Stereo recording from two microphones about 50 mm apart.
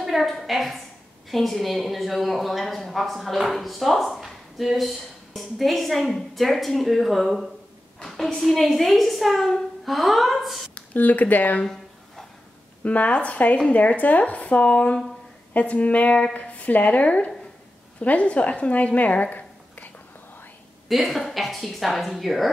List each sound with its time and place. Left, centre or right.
0.0 s a woman's voice: centre
8.0 s a sound: centre
8.4 s a woman's voice: centre
10.7 s speech: left
11.6 s a sound: centre
12.8 s a woman's voice: left
20.9 s a woman's voice: centre